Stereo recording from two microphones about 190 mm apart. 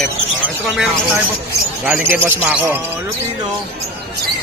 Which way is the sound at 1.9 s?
10° right (ahead or behind).